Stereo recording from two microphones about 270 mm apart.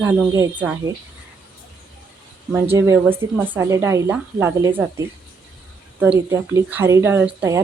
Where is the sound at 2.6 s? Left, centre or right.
Centre.